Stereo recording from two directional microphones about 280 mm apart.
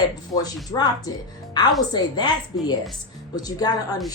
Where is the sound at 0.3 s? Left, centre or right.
Centre.